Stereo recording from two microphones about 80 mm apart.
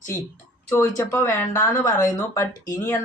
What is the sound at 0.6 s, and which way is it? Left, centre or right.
Speech, left.